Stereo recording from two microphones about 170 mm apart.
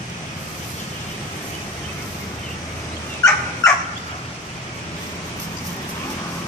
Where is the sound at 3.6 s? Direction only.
20° left (ahead or behind).